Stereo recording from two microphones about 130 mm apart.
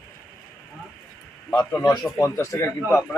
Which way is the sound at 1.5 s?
15° left (ahead or behind).